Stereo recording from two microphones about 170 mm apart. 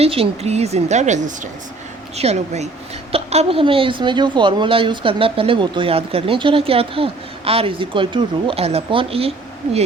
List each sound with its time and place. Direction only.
0.0 s speech: 35° right (ahead or behind)